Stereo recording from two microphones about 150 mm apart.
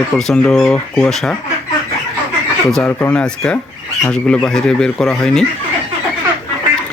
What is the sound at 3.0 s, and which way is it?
Speech, 10° left (ahead or behind).